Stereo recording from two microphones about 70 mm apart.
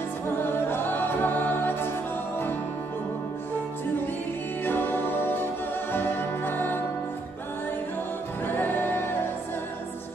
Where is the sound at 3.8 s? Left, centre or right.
Left.